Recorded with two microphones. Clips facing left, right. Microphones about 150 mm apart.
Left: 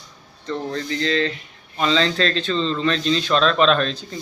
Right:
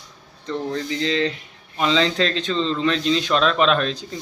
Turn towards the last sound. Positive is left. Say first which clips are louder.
# left 1 dB
turn(degrees=-10)  # may be behind; listen again after turning